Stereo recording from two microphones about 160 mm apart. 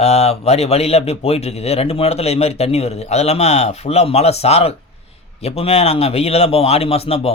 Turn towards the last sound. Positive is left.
turn(degrees=40)  # may be behind; listen again after turning